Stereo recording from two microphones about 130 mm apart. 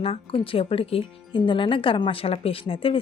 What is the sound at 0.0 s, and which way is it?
A woman's voice, 45° left (ahead or behind).